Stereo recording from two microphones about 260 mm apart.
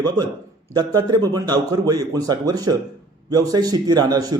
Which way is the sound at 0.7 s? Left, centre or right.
Centre.